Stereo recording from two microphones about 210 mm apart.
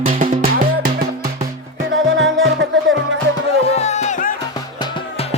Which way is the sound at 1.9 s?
60° right (ahead or behind).